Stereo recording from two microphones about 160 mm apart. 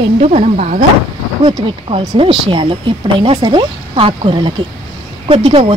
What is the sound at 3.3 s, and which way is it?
Speech, 30° right (ahead or behind).